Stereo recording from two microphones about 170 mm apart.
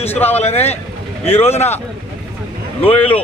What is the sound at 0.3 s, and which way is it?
Speech, 40° left (ahead or behind).